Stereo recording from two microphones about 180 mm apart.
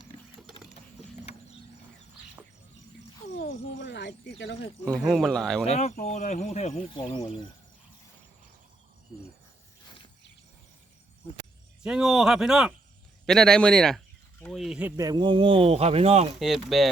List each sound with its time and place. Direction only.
3.4 s speech: 85° left
5.0 s speech: centre (ahead or behind)
5.6 s speech: 40° left (ahead or behind)
11.8 s speech: 5° right (ahead or behind); by 16.3 s 35° right (ahead or behind)
16.4 s speech: centre (ahead or behind)